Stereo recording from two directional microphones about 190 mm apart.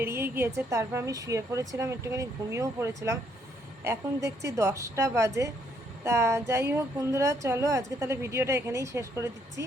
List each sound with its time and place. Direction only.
0.0 s speech: 10° right (ahead or behind)